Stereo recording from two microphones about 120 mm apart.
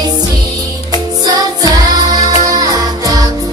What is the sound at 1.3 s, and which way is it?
Music, 35° right (ahead or behind).